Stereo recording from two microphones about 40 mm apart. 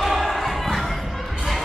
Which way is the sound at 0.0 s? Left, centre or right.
Centre.